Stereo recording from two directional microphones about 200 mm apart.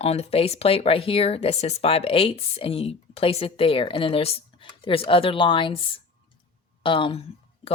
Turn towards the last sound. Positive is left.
turn(degrees=25)  # may be behind; listen again after turning